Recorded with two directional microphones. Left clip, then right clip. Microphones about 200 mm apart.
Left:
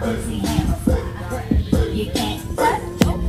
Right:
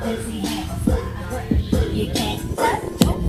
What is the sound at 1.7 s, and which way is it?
Music, 45° right (ahead or behind).